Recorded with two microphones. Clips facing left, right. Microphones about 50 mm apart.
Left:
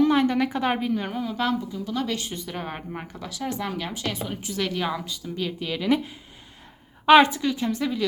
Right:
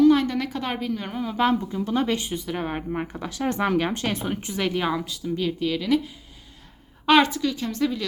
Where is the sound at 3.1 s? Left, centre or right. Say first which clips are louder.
Right 4 dB; right.